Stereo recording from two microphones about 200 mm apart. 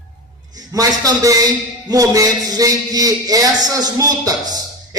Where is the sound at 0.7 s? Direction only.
20° right (ahead or behind).